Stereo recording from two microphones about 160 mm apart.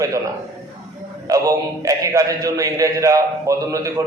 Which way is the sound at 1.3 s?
20° right (ahead or behind).